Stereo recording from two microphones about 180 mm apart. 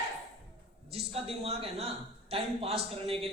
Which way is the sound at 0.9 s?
35° right (ahead or behind).